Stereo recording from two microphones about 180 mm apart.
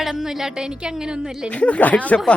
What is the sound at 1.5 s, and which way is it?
Speech, 5° left (ahead or behind).